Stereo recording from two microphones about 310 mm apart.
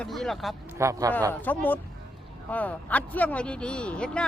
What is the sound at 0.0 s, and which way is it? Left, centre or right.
Speech, centre.